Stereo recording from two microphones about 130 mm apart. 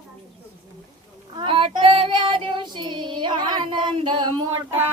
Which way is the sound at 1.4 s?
40° right (ahead or behind).